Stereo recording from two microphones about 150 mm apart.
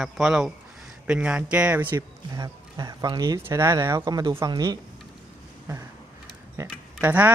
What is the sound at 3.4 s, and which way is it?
Speech, 15° right (ahead or behind).